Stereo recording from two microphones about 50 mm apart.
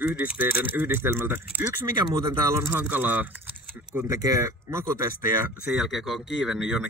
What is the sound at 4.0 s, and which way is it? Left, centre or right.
Speech, right.